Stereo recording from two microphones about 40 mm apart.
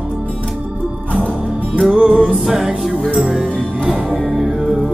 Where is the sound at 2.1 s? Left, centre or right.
Centre.